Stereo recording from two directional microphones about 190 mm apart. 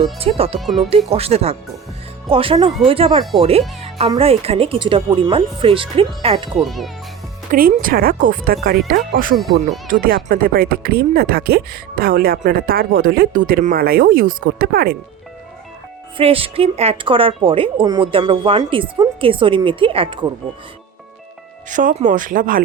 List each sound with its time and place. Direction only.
0.2 s speech: 30° right (ahead or behind)
0.6 s speech: centre (ahead or behind)
1.1 s speech: 30° right (ahead or behind)
6.6 s speech: centre (ahead or behind)
7.5 s speech: 50° right (ahead or behind)
9.3 s speech: centre (ahead or behind)
9.8 s speech: 45° right (ahead or behind)
16.1 s speech: 30° right (ahead or behind)
21.7 s speech: 40° right (ahead or behind)